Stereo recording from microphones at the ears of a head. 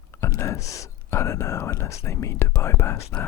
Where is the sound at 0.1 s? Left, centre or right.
Left.